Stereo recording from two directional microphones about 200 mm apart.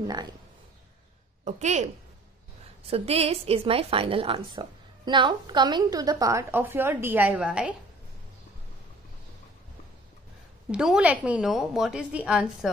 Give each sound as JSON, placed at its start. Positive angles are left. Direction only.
{"t": 0.0, "sound": "a woman's voice", "side_deg": -20}
{"t": 1.4, "sound": "a woman's voice", "side_deg": -35}
{"t": 2.9, "sound": "a woman's voice", "side_deg": -30}
{"t": 10.7, "sound": "a woman's voice", "side_deg": -5}